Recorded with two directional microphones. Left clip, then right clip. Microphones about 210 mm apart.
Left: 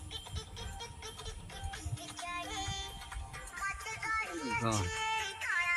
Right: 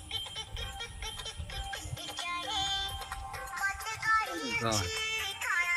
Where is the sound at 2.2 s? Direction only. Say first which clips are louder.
Right 5 dB; 30° right (ahead or behind).